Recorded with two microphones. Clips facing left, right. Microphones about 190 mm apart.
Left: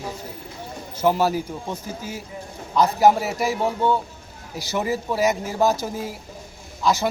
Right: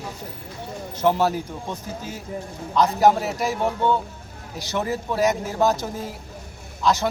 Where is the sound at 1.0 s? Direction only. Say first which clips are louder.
Left 1 dB; 5° left (ahead or behind).